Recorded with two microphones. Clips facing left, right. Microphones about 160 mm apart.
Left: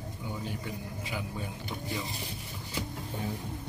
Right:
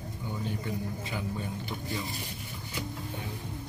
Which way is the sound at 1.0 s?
10° left (ahead or behind).